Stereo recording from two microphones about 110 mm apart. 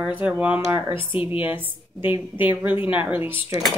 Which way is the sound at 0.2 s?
15° right (ahead or behind).